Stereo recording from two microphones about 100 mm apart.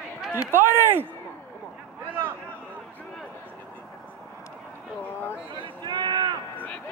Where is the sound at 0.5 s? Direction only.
20° right (ahead or behind).